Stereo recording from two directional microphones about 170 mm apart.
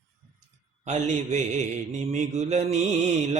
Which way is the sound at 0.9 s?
45° right (ahead or behind).